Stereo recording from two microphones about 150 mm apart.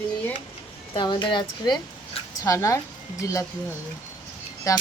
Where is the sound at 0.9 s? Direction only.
30° left (ahead or behind).